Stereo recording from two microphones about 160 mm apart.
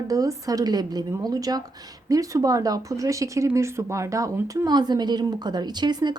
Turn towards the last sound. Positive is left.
turn(degrees=-25)  # may be behind; listen again after turning